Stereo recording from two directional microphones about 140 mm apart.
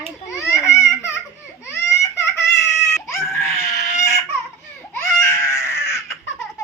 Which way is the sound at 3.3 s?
20° left (ahead or behind).